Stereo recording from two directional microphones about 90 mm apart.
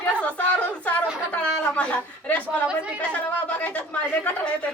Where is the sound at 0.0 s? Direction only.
15° left (ahead or behind).